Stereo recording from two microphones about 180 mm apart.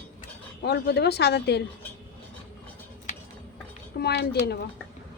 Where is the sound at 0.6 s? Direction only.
65° left (ahead or behind).